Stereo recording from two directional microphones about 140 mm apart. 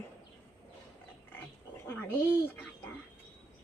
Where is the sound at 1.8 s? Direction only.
15° left (ahead or behind).